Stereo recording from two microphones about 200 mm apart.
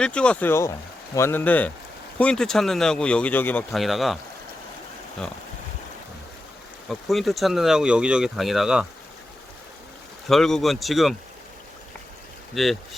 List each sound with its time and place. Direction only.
0.0 s speech: 5° left (ahead or behind)
6.8 s speech: centre (ahead or behind)
10.2 s speech: centre (ahead or behind)
12.5 s speech: centre (ahead or behind)